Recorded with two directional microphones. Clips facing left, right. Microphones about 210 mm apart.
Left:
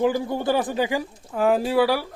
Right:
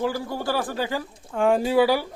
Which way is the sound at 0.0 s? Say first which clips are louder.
Left 4 dB; 20° left (ahead or behind).